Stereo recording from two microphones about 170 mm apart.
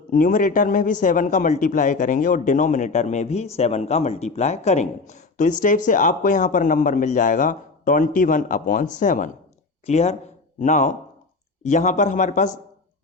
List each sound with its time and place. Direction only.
0.1 s a man's voice: 50° left (ahead or behind)